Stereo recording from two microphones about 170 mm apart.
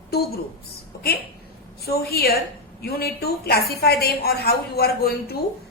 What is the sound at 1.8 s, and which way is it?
A woman's voice, 65° left (ahead or behind).